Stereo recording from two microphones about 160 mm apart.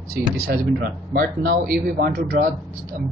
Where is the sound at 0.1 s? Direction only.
65° right (ahead or behind).